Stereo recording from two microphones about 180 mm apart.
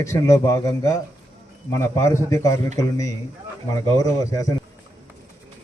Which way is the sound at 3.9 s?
20° left (ahead or behind).